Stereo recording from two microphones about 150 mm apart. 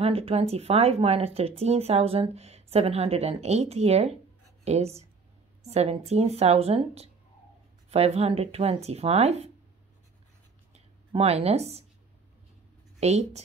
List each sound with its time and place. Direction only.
0.0 s speech: 40° right (ahead or behind)
10.7 s a sound: 45° right (ahead or behind)
13.0 s speech: 45° right (ahead or behind)